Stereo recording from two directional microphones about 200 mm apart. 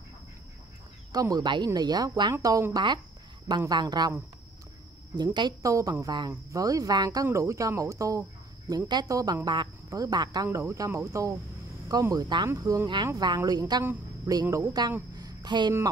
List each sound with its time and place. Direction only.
1.1 s a woman's voice: 20° right (ahead or behind)